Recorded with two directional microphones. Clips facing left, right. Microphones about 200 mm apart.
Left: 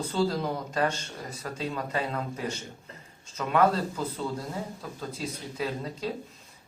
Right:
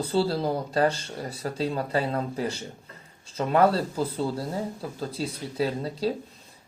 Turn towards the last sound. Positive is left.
turn(degrees=-35)  # may be behind; listen again after turning